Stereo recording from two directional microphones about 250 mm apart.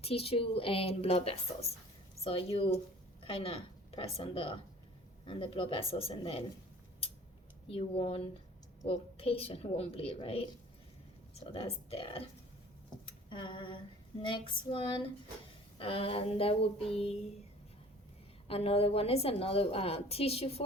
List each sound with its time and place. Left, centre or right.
0.0 s a woman's voice: left
7.7 s a woman's voice: left
13.3 s a woman's voice: centre
18.4 s a woman's voice: left